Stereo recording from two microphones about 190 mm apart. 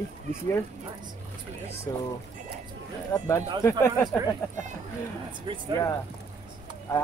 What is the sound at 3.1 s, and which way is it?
Speech, 15° left (ahead or behind).